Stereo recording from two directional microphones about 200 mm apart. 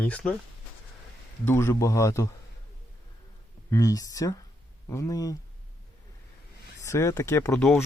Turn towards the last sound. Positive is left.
turn(degrees=5)  # may be behind; listen again after turning